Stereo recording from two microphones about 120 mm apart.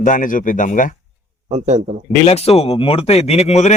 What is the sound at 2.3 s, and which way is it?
Speech, 60° left (ahead or behind).